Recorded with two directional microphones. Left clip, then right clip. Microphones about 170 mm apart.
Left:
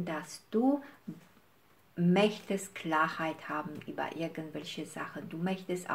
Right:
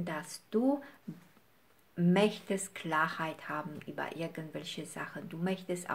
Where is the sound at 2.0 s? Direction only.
35° right (ahead or behind).